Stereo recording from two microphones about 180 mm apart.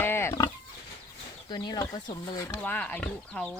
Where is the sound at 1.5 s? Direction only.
20° left (ahead or behind).